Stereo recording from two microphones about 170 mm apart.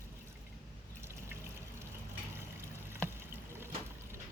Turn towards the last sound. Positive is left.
turn(degrees=-15)  # may be behind; listen again after turning